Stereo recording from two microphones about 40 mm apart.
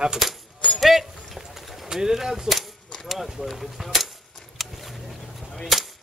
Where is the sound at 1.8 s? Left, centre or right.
Centre.